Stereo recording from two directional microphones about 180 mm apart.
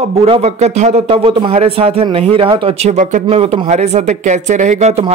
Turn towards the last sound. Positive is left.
turn(degrees=-40)  # may be behind; listen again after turning